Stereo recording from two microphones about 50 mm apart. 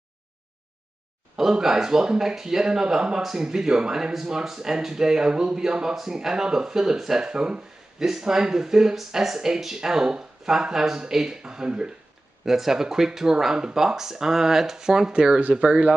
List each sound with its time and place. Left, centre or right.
1.3 s speech: centre